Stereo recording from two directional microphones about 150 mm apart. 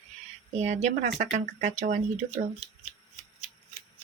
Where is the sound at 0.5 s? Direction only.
50° right (ahead or behind).